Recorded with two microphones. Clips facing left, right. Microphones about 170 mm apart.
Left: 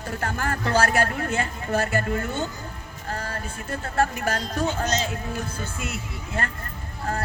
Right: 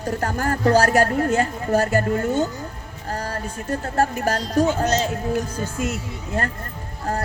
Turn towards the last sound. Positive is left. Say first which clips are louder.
# right 4 dB
turn(degrees=-40)  # may be behind; listen again after turning